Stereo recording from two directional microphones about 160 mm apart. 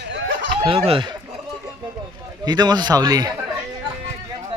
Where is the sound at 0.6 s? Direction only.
35° right (ahead or behind).